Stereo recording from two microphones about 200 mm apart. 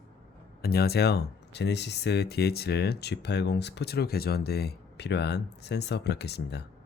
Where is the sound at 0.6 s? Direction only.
50° left (ahead or behind).